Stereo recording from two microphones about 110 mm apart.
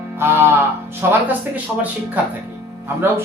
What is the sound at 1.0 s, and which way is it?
Speech, 20° right (ahead or behind).